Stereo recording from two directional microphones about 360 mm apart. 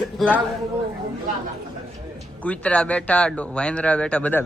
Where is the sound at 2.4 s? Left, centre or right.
Centre.